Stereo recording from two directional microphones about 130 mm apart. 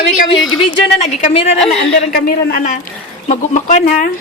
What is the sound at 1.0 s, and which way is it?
Speech, 60° left (ahead or behind).